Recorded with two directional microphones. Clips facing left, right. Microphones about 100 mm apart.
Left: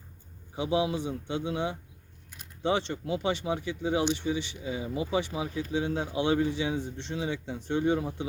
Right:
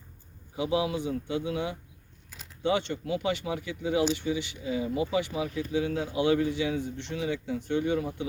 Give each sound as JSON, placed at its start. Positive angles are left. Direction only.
{"t": 0.5, "sound": "speech", "side_deg": 30}